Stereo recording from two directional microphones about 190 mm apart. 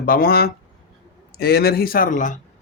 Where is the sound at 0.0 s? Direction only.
50° left (ahead or behind).